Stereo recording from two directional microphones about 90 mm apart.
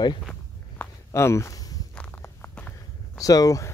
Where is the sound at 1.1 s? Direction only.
35° left (ahead or behind).